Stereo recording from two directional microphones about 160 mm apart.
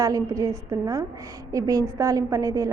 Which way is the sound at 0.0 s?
20° right (ahead or behind).